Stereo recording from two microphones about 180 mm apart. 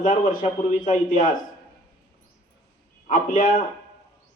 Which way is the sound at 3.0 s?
50° left (ahead or behind).